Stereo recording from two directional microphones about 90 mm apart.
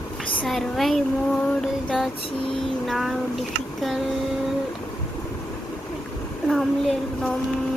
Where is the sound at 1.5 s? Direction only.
15° left (ahead or behind).